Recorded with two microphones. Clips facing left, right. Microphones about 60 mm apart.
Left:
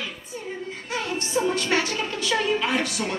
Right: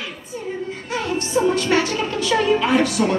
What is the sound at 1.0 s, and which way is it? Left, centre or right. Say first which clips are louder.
A woman's voice: right 6 dB; right.